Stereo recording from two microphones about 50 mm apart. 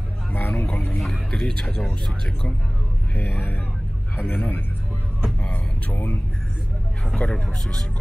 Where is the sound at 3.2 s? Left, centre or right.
Left.